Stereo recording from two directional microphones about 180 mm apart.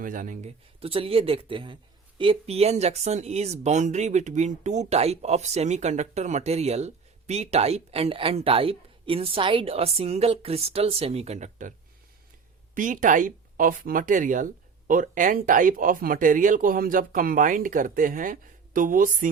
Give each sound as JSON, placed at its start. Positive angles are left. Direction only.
{"t": 0.0, "sound": "speech", "side_deg": -50}
{"t": 0.8, "sound": "speech", "side_deg": -30}
{"t": 12.7, "sound": "speech", "side_deg": -45}